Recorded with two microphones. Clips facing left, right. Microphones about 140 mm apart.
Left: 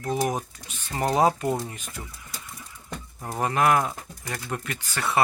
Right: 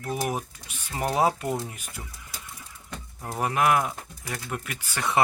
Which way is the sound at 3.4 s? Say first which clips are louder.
Left 1 dB; 10° right (ahead or behind).